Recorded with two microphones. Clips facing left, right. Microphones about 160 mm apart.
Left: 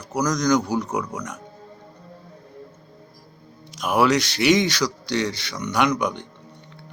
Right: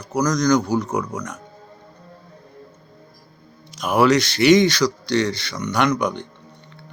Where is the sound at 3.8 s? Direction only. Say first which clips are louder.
Right 3 dB; 5° left (ahead or behind).